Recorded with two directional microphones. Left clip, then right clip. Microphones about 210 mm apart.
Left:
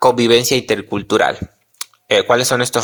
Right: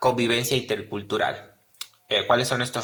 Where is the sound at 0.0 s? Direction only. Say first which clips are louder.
Left 10 dB; 40° left (ahead or behind).